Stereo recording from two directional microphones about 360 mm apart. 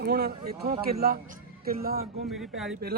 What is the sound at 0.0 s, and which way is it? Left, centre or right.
Speech, right.